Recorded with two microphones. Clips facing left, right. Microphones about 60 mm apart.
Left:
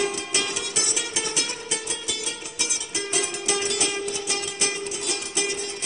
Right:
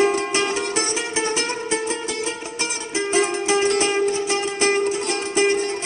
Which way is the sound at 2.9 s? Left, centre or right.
Right.